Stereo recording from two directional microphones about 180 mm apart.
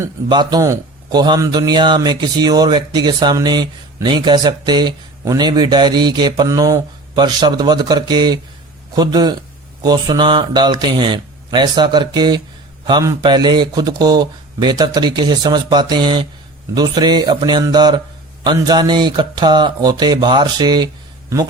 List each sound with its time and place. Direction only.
0.3 s a man's voice: 25° right (ahead or behind)